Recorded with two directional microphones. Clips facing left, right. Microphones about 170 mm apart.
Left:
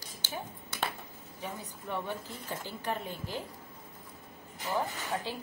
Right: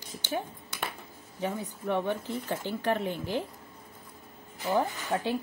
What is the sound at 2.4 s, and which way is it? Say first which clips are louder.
Speech: right 6 dB; 70° right (ahead or behind).